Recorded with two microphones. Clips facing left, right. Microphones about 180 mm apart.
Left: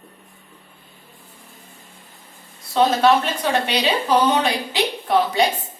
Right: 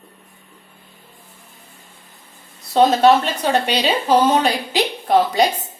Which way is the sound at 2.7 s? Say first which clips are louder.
Right 3 dB; 40° right (ahead or behind).